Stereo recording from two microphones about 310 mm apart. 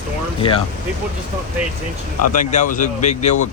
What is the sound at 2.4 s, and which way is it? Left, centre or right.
Speech, left.